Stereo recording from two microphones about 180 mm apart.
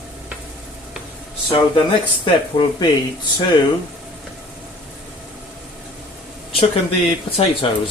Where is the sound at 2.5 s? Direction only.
30° left (ahead or behind).